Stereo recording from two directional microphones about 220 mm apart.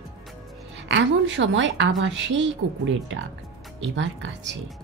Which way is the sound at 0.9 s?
55° right (ahead or behind).